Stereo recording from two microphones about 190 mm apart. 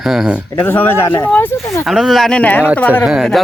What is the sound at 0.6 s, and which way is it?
Speech, 10° left (ahead or behind).